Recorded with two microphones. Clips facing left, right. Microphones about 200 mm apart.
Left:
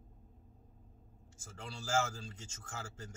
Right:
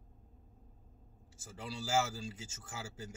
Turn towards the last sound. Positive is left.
turn(degrees=-10)  # may be behind; listen again after turning